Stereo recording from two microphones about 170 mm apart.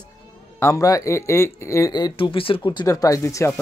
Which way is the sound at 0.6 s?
15° left (ahead or behind).